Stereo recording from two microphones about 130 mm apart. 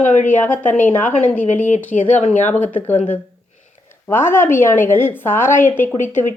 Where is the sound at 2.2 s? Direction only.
65° left (ahead or behind).